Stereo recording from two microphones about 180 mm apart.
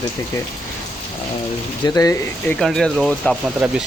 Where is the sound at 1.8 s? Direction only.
20° left (ahead or behind).